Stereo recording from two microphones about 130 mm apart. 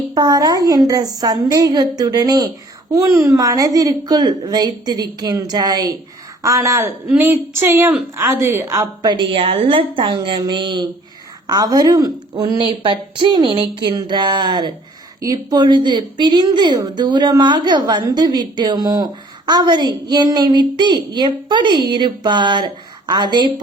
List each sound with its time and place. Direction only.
0.1 s a woman's voice: 30° right (ahead or behind)